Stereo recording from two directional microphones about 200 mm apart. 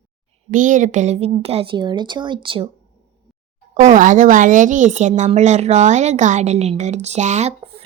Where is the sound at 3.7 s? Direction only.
40° right (ahead or behind).